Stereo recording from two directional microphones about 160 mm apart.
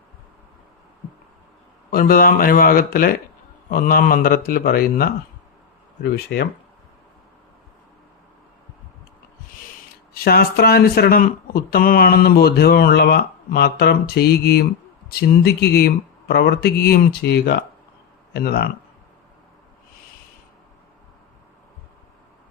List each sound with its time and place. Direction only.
1.9 s a man's voice: 65° left (ahead or behind)
6.0 s speech: 85° left
10.2 s speech: 75° left (ahead or behind)
18.3 s speech: 75° left (ahead or behind)